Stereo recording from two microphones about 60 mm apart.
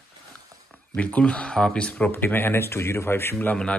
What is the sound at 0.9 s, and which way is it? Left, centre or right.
Speech, left.